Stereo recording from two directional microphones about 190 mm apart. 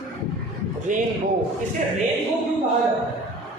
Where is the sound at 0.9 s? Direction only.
40° right (ahead or behind).